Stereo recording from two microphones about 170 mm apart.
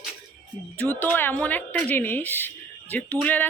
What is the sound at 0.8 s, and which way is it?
Speech, 10° left (ahead or behind).